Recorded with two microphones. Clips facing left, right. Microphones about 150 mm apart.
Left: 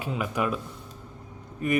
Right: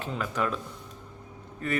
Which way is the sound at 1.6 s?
15° left (ahead or behind).